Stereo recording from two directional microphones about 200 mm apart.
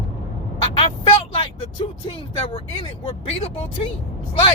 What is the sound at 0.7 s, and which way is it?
Speech, 25° left (ahead or behind).